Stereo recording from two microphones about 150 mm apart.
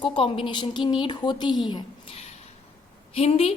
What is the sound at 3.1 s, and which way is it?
Speech, 40° left (ahead or behind).